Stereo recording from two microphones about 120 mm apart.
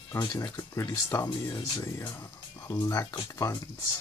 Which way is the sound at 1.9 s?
25° left (ahead or behind).